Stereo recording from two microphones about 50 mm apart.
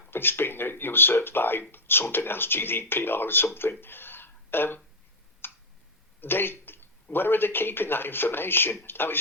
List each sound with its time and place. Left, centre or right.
0.1 s speech: left
5.4 s tick: left
6.1 s a man's voice: left